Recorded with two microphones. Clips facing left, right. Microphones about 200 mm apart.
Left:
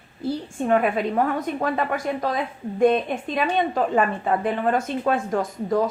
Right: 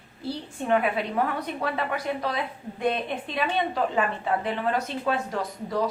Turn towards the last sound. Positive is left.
turn(degrees=50)  # may be behind; listen again after turning